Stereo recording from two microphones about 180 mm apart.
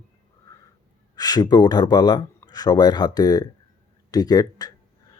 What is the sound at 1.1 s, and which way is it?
Speech, 20° left (ahead or behind).